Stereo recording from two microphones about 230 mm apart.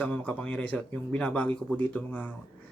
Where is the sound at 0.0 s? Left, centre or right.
Centre.